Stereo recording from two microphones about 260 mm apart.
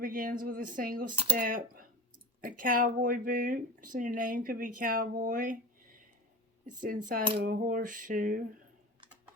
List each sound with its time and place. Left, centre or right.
0.0 s speech: right